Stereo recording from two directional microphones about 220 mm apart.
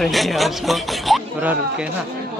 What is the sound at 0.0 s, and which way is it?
A man's voice, centre (ahead or behind).